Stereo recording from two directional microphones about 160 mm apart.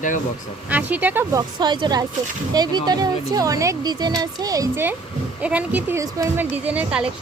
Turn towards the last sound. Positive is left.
turn(degrees=-5)  # may be behind; listen again after turning